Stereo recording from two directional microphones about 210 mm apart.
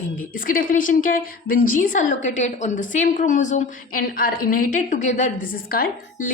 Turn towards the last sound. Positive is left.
turn(degrees=40)  # may be behind; listen again after turning